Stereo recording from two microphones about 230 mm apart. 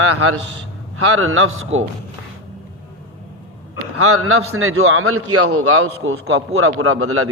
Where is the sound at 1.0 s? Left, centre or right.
Right.